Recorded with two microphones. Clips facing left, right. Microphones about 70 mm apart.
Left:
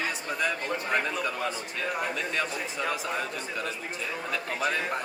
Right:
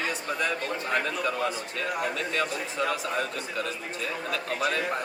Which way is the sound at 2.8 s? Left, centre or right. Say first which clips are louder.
Right 3 dB; centre.